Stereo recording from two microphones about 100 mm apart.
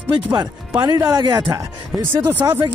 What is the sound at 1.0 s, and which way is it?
Speech, 30° right (ahead or behind).